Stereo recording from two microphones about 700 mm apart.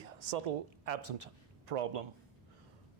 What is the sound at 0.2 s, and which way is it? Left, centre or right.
Speech, right.